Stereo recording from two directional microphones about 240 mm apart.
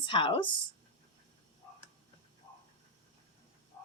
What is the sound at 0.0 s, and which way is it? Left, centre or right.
Speech, left.